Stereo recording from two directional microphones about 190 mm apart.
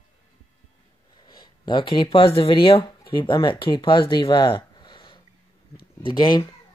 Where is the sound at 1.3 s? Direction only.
25° left (ahead or behind).